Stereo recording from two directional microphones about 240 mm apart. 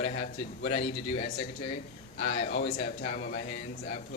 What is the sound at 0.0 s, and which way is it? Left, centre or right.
A man's voice, left.